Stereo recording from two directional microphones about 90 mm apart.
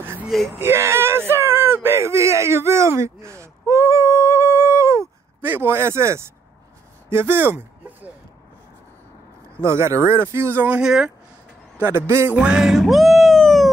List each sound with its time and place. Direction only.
0.6 s a sound: 30° right (ahead or behind)
5.4 s speech: 25° right (ahead or behind)
9.6 s speech: 30° right (ahead or behind)
10.7 s speech: 5° right (ahead or behind)
11.8 s speech: 30° right (ahead or behind)
12.4 s music: 5° right (ahead or behind)